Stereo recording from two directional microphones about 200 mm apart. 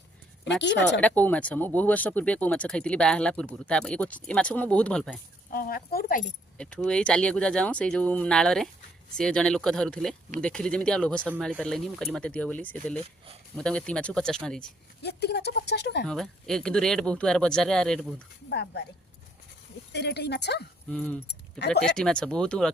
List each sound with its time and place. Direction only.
1.0 s speech: 10° left (ahead or behind)
5.5 s speech: 45° left (ahead or behind)
6.6 s speech: 5° left (ahead or behind)
15.0 s speech: 55° left (ahead or behind)
16.0 s speech: centre (ahead or behind)
18.4 s speech: 55° left (ahead or behind)
19.9 s speech: 55° left (ahead or behind)
20.9 s speech: 5° left (ahead or behind)